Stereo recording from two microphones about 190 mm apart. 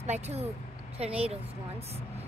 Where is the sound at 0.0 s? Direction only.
35° right (ahead or behind).